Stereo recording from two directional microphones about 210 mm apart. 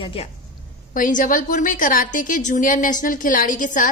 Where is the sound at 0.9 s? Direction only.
40° left (ahead or behind).